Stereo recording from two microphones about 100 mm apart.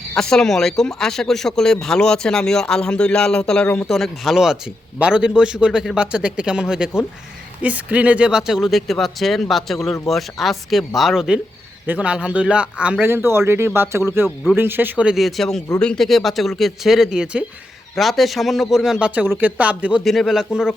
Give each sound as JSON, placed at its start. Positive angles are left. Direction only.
{"t": 0.2, "sound": "a man's voice", "side_deg": 5}
{"t": 13.1, "sound": "speech", "side_deg": -25}
{"t": 15.1, "sound": "speech", "side_deg": 0}
{"t": 20.1, "sound": "speech", "side_deg": 0}